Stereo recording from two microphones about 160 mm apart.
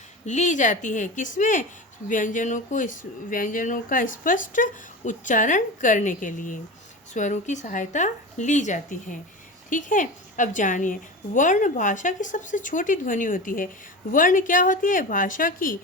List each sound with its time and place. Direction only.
0.3 s a woman's voice: 50° left (ahead or behind)